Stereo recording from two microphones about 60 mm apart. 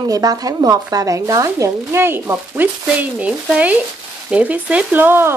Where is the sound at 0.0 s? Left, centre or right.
Right.